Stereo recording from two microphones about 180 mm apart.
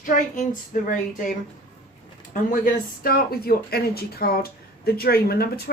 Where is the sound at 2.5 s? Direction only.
50° left (ahead or behind).